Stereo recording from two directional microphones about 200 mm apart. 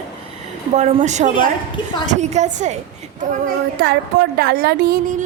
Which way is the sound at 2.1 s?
35° right (ahead or behind).